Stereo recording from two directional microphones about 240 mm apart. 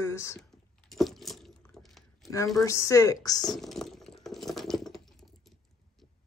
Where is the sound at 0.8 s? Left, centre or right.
Centre.